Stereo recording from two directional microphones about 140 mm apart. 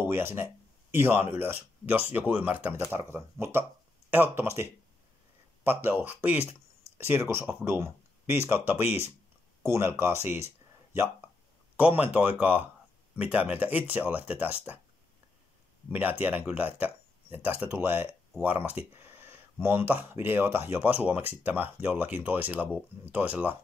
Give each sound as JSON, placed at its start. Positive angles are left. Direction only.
{"t": 0.0, "sound": "speech", "side_deg": -15}
{"t": 11.7, "sound": "speech", "side_deg": -10}
{"t": 15.9, "sound": "speech", "side_deg": -10}